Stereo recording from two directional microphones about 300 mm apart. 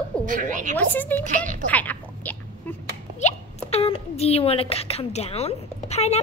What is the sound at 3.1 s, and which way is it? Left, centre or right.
Speech, left.